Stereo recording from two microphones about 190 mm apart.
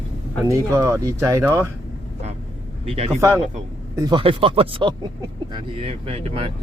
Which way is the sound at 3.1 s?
15° right (ahead or behind).